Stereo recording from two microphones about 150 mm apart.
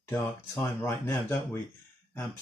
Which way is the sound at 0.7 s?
15° left (ahead or behind).